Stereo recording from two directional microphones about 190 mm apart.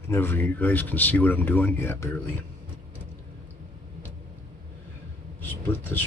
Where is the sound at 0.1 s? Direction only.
10° left (ahead or behind).